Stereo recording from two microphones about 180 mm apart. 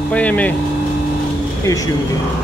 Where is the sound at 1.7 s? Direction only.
20° left (ahead or behind).